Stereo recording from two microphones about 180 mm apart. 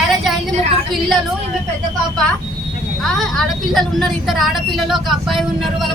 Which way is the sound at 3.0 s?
Centre (ahead or behind).